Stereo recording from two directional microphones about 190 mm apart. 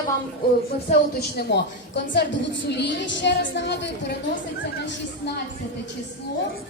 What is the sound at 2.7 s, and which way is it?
A woman's voice, 65° left (ahead or behind).